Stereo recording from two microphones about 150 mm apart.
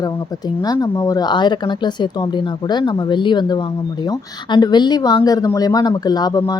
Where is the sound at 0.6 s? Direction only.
25° left (ahead or behind).